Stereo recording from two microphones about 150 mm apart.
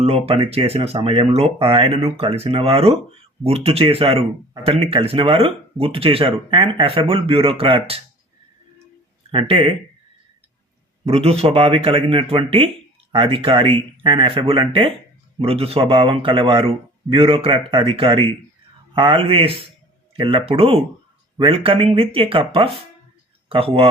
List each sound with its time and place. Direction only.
0.0 s speech: 40° right (ahead or behind)
9.3 s speech: 40° right (ahead or behind)
11.0 s speech: 40° right (ahead or behind)